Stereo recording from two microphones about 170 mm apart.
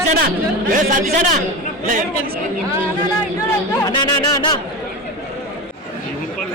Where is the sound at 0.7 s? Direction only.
55° right (ahead or behind).